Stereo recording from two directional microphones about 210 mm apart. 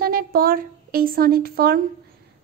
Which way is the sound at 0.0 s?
45° right (ahead or behind).